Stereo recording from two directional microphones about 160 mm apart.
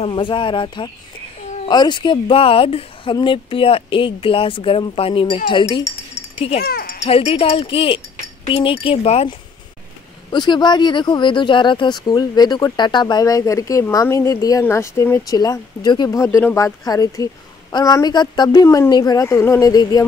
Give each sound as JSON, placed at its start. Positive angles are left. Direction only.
{"t": 0.0, "sound": "speech", "side_deg": 30}
{"t": 6.3, "sound": "a child's voice", "side_deg": 40}
{"t": 6.6, "sound": "a sound", "side_deg": 70}
{"t": 7.1, "sound": "speech", "side_deg": 35}
{"t": 10.3, "sound": "speech", "side_deg": 25}